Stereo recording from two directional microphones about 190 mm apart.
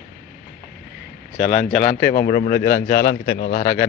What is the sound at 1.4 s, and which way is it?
Speech, 40° left (ahead or behind).